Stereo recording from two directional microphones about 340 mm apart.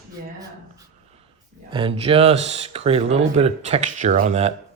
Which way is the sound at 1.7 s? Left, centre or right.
Centre.